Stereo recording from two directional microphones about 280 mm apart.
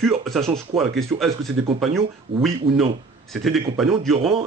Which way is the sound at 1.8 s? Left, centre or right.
Centre.